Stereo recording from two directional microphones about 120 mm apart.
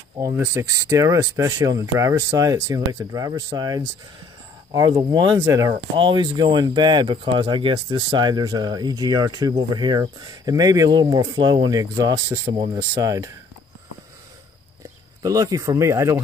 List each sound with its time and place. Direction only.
0.2 s speech: 25° right (ahead or behind)
5.9 s speech: 40° right (ahead or behind)
12.5 s speech: 45° right (ahead or behind)
13.0 s speech: 30° right (ahead or behind)
15.2 s speech: 30° right (ahead or behind)